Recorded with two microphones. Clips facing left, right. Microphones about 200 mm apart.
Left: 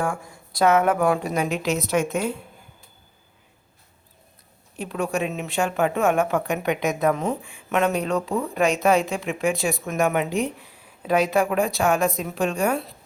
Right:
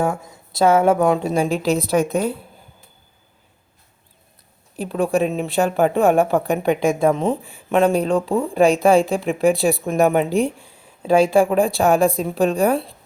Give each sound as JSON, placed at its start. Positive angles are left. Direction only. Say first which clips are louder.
{"t": 0.0, "sound": "a woman's voice", "louder": "right 5 dB", "side_deg": -25}
{"t": 4.8, "sound": "a woman's voice", "louder": "right 6 dB", "side_deg": -35}